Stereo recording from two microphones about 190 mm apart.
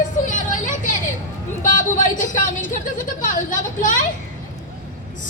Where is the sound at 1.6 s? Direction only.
40° left (ahead or behind).